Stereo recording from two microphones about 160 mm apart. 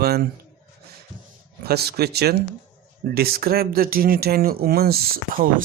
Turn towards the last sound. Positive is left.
turn(degrees=-65)  # may be behind; listen again after turning